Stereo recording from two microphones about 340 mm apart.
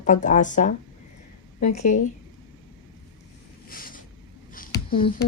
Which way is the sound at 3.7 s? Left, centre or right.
Left.